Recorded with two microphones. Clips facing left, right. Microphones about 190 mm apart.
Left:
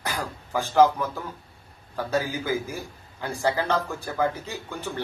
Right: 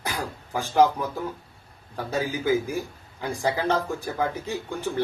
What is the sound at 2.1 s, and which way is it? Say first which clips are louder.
A man's voice: right 2 dB; 15° right (ahead or behind).